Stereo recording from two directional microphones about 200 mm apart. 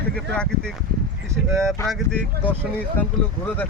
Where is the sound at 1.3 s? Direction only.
15° right (ahead or behind).